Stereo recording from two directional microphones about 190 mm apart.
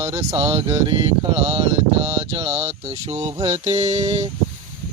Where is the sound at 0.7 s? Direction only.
15° right (ahead or behind).